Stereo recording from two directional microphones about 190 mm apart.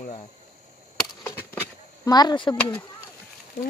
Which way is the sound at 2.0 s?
20° left (ahead or behind).